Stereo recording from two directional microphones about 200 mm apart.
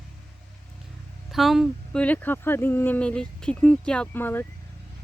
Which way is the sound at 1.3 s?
Centre (ahead or behind).